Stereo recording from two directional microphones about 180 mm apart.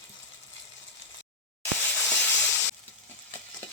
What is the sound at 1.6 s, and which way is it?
Sizzle, 10° left (ahead or behind).